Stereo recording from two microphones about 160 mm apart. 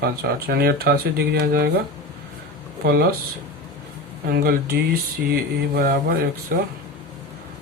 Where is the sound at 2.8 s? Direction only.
90° right.